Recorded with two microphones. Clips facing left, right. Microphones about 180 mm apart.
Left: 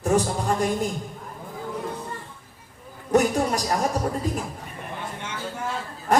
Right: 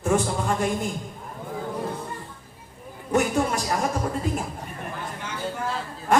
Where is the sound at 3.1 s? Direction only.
40° left (ahead or behind).